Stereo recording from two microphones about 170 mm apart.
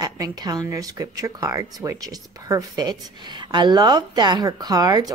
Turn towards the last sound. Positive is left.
turn(degrees=-20)  # may be behind; listen again after turning